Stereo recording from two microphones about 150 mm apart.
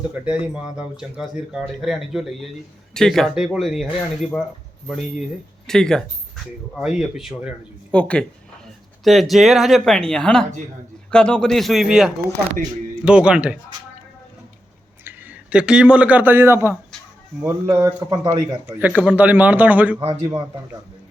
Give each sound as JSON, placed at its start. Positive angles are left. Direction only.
{"t": 0.1, "sound": "speech", "side_deg": -10}
{"t": 5.6, "sound": "speech", "side_deg": 5}
{"t": 15.0, "sound": "a man's voice", "side_deg": -10}
{"t": 18.8, "sound": "speech", "side_deg": -10}